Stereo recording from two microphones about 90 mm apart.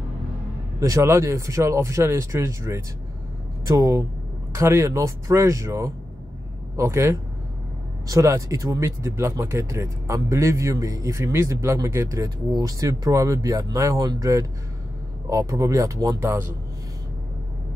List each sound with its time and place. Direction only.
0.7 s speech: 35° right (ahead or behind)
12.4 s speech: 45° right (ahead or behind)
16.2 s a man's voice: 25° right (ahead or behind)